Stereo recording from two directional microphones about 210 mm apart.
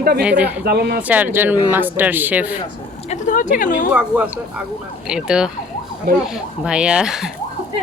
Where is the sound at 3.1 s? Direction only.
35° left (ahead or behind).